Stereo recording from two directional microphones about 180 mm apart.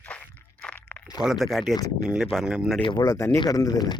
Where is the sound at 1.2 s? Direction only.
Centre (ahead or behind).